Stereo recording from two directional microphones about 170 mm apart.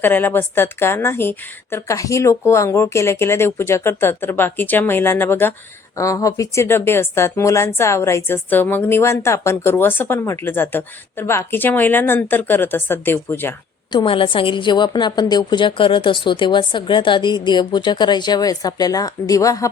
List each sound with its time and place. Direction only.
0.0 s speech: 10° left (ahead or behind)
13.9 s a woman's voice: 30° left (ahead or behind)